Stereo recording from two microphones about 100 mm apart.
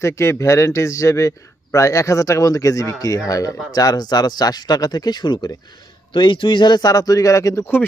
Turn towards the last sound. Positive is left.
turn(degrees=35)  # may be behind; listen again after turning